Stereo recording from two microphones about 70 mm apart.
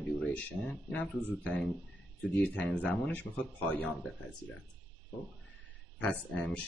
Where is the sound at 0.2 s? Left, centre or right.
Centre.